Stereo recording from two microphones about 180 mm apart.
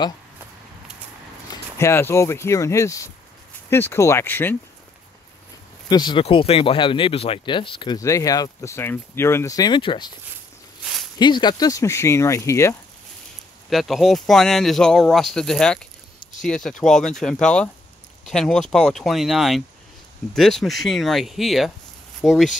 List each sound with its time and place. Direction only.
1.5 s speech: 15° left (ahead or behind)
5.9 s speech: 25° left (ahead or behind)
11.1 s speech: 25° left (ahead or behind)
13.7 s speech: centre (ahead or behind)